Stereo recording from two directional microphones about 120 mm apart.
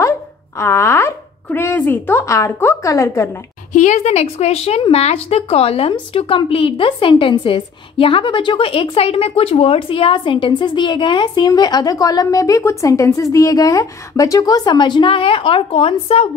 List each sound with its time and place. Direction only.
0.6 s speech: 25° left (ahead or behind)
3.7 s speech: 85° left; by 16.3 s 50° left (ahead or behind)